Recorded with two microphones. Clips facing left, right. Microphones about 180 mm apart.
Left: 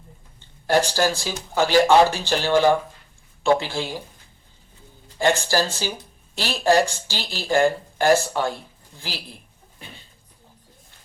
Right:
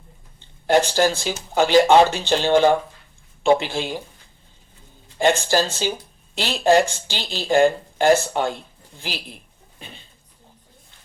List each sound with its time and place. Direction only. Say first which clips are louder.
0.3 s speech: right 2 dB; 20° right (ahead or behind)
5.1 s speech: right 2 dB; 20° right (ahead or behind)